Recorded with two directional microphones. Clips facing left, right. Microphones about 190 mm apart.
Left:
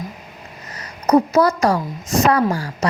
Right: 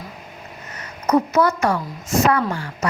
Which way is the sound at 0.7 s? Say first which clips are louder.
Left 3 dB; 35° left (ahead or behind).